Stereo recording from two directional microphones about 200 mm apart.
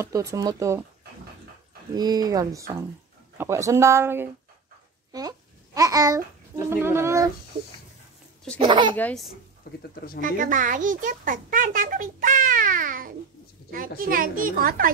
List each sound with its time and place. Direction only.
0.0 s speech: 15° right (ahead or behind)
2.0 s speech: 20° right (ahead or behind)
5.8 s babbling: 15° right (ahead or behind)
6.7 s speech: 10° right (ahead or behind)
8.5 s speech: 25° right (ahead or behind)
8.9 s speech: 5° left (ahead or behind)
9.6 s speech: 50° left (ahead or behind)
10.2 s a child's voice: 40° right (ahead or behind)